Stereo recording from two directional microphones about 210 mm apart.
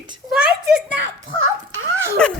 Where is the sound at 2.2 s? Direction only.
5° left (ahead or behind).